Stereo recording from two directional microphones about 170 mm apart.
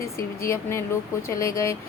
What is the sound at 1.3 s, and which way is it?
Speech, 20° left (ahead or behind).